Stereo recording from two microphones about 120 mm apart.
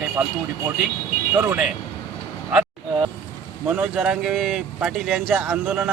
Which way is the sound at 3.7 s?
10° right (ahead or behind).